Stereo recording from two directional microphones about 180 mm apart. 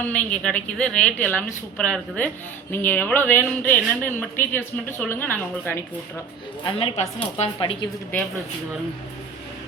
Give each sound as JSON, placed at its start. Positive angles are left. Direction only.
{"t": 0.0, "sound": "speech", "side_deg": 10}
{"t": 6.7, "sound": "a woman's voice", "side_deg": 30}